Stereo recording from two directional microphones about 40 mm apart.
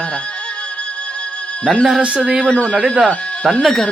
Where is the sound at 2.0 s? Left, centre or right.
Right.